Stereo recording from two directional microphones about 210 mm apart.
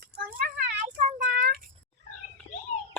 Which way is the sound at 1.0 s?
35° right (ahead or behind).